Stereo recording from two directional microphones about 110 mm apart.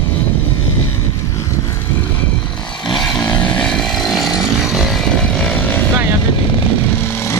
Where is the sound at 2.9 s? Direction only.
5° left (ahead or behind).